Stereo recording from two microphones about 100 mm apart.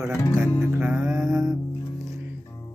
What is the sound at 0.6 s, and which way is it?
Music, 20° right (ahead or behind).